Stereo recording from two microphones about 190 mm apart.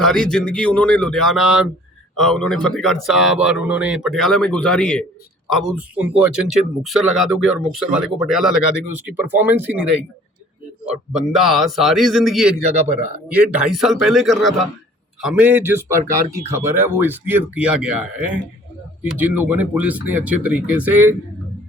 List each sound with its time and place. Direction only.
0.0 s speech: 5° left (ahead or behind)
11.1 s speech: centre (ahead or behind)